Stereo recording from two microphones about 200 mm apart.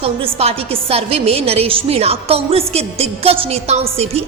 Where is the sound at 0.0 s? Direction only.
30° right (ahead or behind).